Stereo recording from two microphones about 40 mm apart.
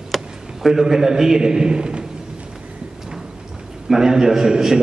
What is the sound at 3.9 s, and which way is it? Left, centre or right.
Speech, centre.